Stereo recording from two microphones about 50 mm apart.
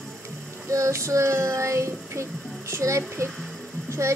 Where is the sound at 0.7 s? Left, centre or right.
Right.